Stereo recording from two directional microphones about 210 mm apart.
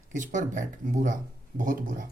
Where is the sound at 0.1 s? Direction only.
35° right (ahead or behind).